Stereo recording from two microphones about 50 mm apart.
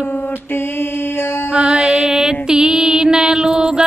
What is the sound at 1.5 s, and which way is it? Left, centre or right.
Music, centre.